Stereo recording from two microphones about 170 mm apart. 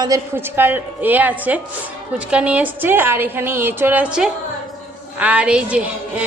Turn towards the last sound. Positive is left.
turn(degrees=-5)  # may be behind; listen again after turning